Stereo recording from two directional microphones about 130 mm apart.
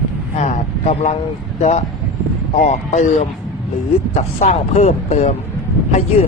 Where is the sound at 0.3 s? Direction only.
60° left (ahead or behind).